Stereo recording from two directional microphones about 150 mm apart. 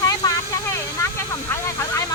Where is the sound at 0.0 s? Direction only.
25° left (ahead or behind).